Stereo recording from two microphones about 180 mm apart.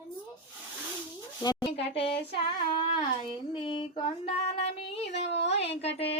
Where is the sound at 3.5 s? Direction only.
25° left (ahead or behind).